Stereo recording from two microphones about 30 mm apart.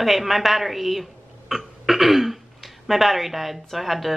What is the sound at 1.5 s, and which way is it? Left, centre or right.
Throat clearing, centre.